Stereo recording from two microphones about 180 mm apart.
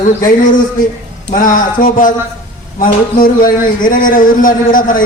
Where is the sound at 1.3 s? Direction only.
50° left (ahead or behind).